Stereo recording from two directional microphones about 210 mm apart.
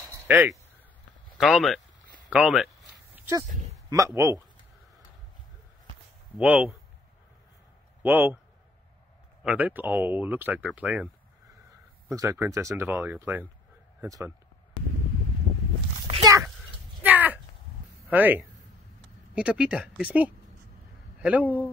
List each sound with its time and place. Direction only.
0.3 s speech: 10° right (ahead or behind)
3.7 s a man's voice: 15° right (ahead or behind)
6.4 s speech: 5° right (ahead or behind)
8.0 s speech: 10° right (ahead or behind)
9.4 s speech: 5° right (ahead or behind)
12.1 s speech: 15° right (ahead or behind)
16.1 s a sound: 20° right (ahead or behind)
17.0 s a sound: 10° right (ahead or behind)
18.1 s speech: 10° right (ahead or behind)